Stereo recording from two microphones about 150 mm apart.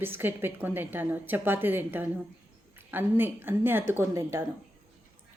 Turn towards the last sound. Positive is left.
turn(degrees=-15)  # may be behind; listen again after turning